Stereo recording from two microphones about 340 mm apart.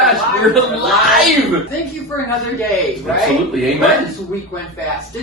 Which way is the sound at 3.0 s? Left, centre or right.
Centre.